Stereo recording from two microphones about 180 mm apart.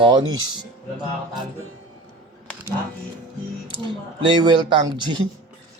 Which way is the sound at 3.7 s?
25° right (ahead or behind).